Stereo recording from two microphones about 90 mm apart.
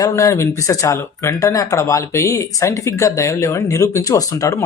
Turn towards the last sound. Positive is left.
turn(degrees=35)  # may be behind; listen again after turning